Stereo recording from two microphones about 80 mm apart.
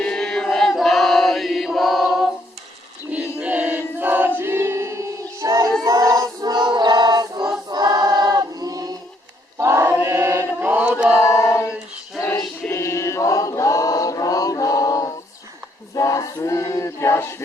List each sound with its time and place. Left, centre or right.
0.0 s chant: centre
3.1 s choir: centre; by 9.0 s right
9.6 s chant: right; by 11.2 s centre
11.2 s a sound: left
12.6 s choir: left
16.0 s a sound: left